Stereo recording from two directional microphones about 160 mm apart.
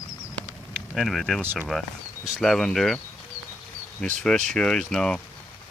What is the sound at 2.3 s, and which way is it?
Speech, 5° left (ahead or behind).